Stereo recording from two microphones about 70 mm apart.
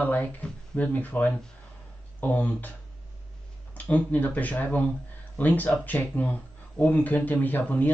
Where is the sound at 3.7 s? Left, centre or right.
Left.